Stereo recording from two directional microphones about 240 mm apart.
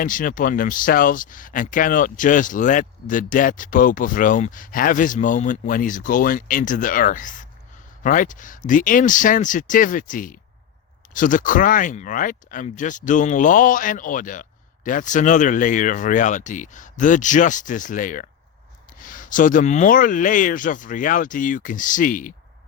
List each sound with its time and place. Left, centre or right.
0.0 s speech: left